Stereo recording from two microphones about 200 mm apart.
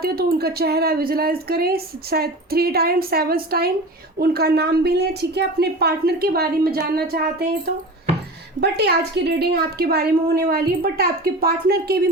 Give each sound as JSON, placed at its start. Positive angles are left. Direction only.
{"t": 0.0, "sound": "a woman's voice", "side_deg": -50}